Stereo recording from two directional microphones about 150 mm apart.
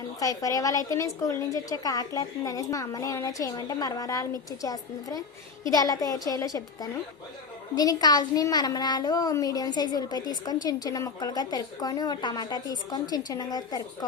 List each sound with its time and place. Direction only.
0.2 s speech: 25° left (ahead or behind)
7.8 s speech: 25° left (ahead or behind)